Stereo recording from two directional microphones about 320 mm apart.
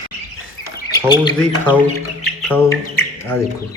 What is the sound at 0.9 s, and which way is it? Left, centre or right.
Speech, centre.